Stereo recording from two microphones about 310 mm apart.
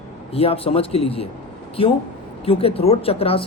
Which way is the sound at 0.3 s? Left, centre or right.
Centre.